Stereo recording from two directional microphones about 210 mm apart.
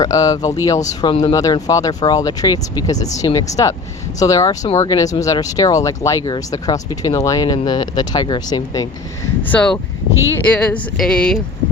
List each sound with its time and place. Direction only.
0.0 s speech: 15° left (ahead or behind)
9.5 s speech: 5° left (ahead or behind)